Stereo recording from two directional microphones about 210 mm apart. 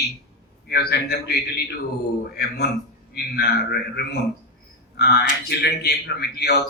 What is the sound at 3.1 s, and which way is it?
Speech, 45° left (ahead or behind).